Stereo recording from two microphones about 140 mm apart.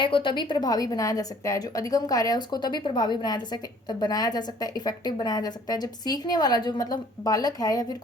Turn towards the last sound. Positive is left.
turn(degrees=25)  # may be behind; listen again after turning